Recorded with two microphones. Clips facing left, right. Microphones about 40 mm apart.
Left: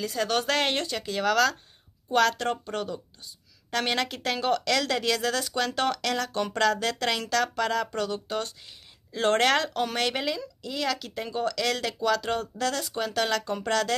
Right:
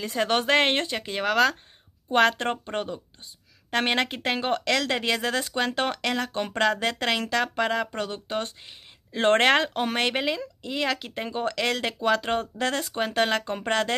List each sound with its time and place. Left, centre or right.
0.0 s speech: right